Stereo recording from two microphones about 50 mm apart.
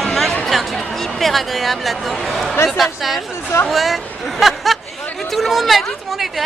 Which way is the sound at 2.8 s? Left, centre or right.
Centre.